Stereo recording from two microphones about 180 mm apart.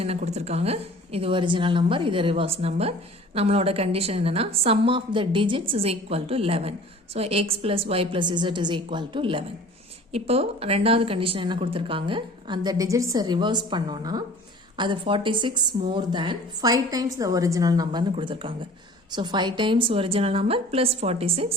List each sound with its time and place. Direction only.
0.0 s a woman's voice: 35° right (ahead or behind)